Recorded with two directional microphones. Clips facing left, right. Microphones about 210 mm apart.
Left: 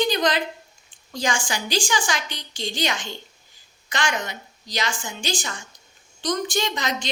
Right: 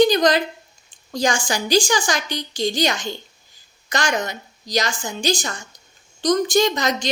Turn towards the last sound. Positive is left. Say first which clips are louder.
# right 7 dB
turn(degrees=-40)  # may be behind; listen again after turning